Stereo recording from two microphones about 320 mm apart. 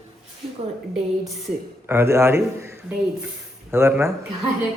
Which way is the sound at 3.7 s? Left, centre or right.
Centre.